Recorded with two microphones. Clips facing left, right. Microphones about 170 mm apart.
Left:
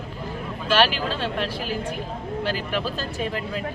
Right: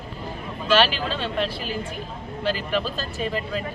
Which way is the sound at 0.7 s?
10° left (ahead or behind).